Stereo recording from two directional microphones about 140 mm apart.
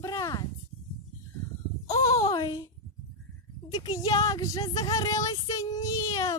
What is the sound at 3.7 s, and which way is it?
Speech, 25° left (ahead or behind).